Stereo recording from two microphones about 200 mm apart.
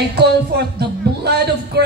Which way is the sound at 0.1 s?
55° right (ahead or behind).